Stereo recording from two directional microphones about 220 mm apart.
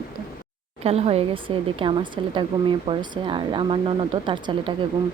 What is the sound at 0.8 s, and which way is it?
A woman's voice, 30° right (ahead or behind).